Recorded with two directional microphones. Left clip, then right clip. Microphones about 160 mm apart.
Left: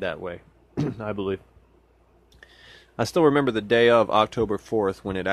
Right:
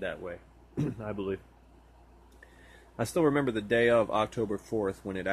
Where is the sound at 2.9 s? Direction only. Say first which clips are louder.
Left 7 dB; 45° left (ahead or behind).